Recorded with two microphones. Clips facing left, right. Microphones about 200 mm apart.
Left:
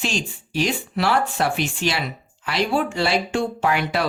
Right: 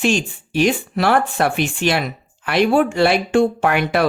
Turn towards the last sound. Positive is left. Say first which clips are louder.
# right 4 dB
turn(degrees=-55)  # may be behind; listen again after turning